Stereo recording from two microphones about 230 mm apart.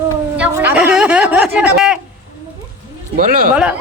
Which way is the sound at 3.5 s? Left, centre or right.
Centre.